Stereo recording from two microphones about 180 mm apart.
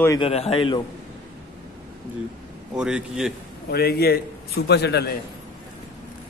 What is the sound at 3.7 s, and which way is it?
A man's voice, 60° left (ahead or behind).